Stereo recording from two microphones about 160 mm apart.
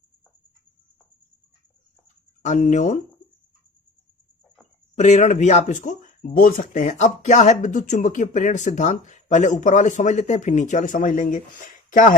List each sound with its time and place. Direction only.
2.4 s speech: 50° left (ahead or behind)
4.9 s speech: 45° left (ahead or behind)